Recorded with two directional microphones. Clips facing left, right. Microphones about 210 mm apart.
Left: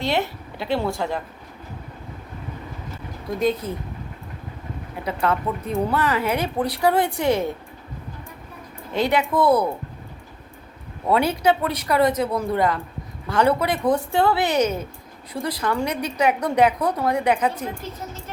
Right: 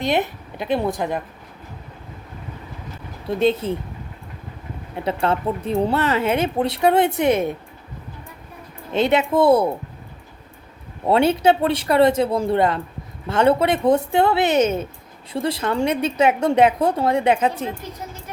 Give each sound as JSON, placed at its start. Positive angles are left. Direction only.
{"t": 0.0, "sound": "a woman's voice", "side_deg": -15}
{"t": 3.2, "sound": "a woman's voice", "side_deg": -30}
{"t": 5.2, "sound": "a woman's voice", "side_deg": -25}
{"t": 8.9, "sound": "a woman's voice", "side_deg": -25}
{"t": 11.0, "sound": "a woman's voice", "side_deg": -25}